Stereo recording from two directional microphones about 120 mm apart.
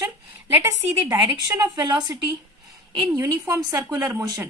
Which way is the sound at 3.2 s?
25° right (ahead or behind).